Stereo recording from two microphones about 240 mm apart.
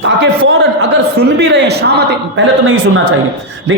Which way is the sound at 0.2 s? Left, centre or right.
Right.